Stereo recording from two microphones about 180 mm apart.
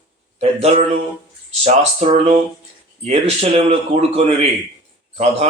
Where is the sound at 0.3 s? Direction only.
35° right (ahead or behind).